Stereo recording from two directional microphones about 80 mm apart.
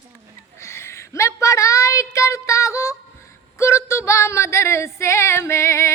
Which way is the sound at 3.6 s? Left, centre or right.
Left.